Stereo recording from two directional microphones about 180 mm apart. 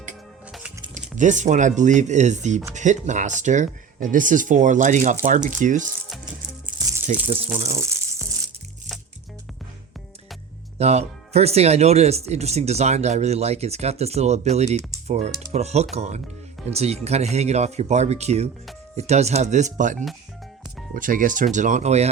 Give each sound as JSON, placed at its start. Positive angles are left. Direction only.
{"t": 0.9, "sound": "speech", "side_deg": -45}
{"t": 7.1, "sound": "speech", "side_deg": -40}
{"t": 7.7, "sound": "speech", "side_deg": -15}
{"t": 10.8, "sound": "speech", "side_deg": -35}